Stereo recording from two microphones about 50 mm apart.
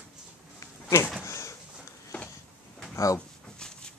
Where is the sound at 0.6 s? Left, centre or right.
Left.